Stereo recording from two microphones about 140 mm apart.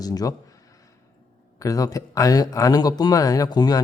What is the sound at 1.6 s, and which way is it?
Speech, 25° left (ahead or behind).